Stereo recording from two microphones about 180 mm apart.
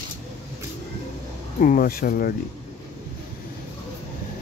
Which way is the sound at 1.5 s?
50° left (ahead or behind).